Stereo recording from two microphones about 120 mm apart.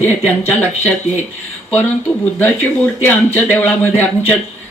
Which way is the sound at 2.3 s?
20° left (ahead or behind).